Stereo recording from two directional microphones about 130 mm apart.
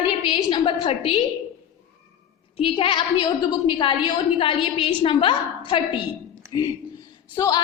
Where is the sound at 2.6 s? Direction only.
40° left (ahead or behind).